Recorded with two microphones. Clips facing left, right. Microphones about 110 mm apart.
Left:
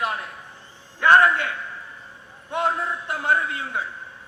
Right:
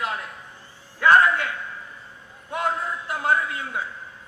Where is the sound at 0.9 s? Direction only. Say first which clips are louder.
Left 1 dB; 25° left (ahead or behind).